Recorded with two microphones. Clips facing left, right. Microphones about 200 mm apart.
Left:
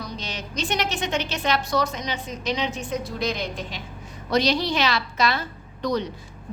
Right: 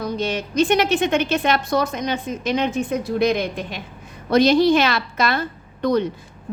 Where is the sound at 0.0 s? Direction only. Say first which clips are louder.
Right 10 dB; 55° right (ahead or behind).